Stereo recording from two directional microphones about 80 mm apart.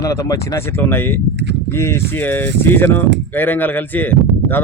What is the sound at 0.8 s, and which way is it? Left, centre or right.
Speech, left.